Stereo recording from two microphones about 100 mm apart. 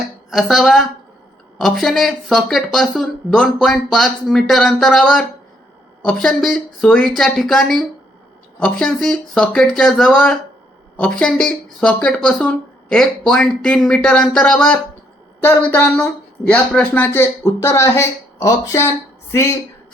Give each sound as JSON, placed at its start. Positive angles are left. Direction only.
{"t": 0.3, "sound": "speech", "side_deg": 0}
{"t": 15.4, "sound": "a woman's voice", "side_deg": 20}